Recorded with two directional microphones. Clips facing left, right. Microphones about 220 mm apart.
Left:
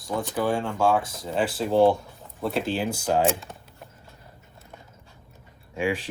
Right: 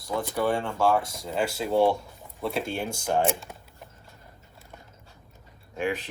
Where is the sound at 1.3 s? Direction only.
Centre (ahead or behind).